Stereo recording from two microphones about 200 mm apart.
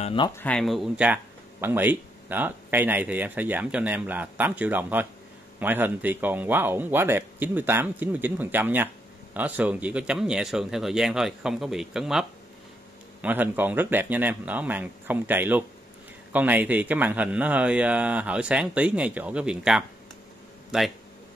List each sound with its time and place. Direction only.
0.0 s speech: 25° left (ahead or behind)
0.4 s speech: 5° left (ahead or behind)